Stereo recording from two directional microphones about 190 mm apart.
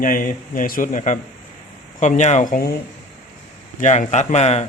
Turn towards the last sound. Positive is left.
turn(degrees=35)  # may be behind; listen again after turning